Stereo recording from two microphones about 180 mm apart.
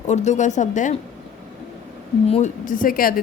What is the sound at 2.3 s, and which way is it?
Speech, 40° left (ahead or behind).